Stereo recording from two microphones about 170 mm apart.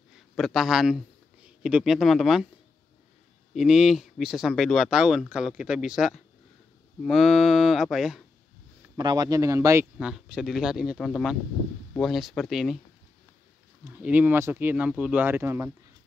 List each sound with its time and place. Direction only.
0.4 s speech: centre (ahead or behind)
3.5 s speech: centre (ahead or behind)
8.9 s speech: 25° right (ahead or behind)
9.9 s speech: 5° right (ahead or behind)
13.9 s speech: 10° right (ahead or behind)